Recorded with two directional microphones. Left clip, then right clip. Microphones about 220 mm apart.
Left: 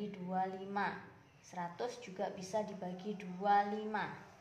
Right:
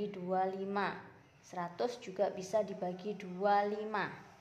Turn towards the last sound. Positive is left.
turn(degrees=-40)  # may be behind; listen again after turning